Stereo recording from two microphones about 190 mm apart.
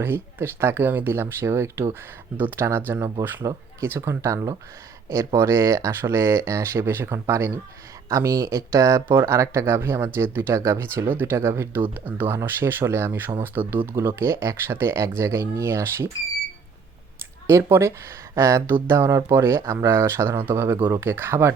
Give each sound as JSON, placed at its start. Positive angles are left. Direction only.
{"t": 0.0, "sound": "speech", "side_deg": -10}
{"t": 17.4, "sound": "speech", "side_deg": -15}